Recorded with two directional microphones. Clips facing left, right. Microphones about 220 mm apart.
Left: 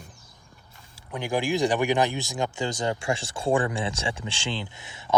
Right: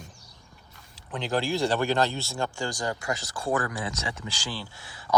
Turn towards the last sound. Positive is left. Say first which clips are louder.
# left 2 dB
turn(degrees=20)  # may be behind; listen again after turning